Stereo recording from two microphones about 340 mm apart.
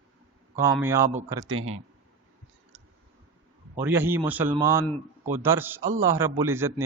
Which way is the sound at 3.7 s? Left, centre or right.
Centre.